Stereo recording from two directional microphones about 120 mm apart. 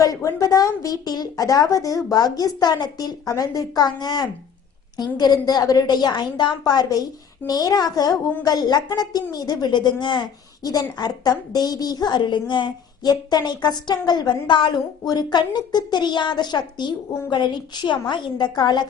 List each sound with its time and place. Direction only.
0.0 s a woman's voice: 25° left (ahead or behind)